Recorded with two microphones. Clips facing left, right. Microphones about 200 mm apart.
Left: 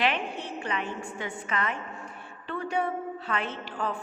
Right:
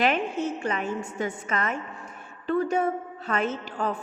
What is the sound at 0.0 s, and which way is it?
A man's voice, 45° right (ahead or behind).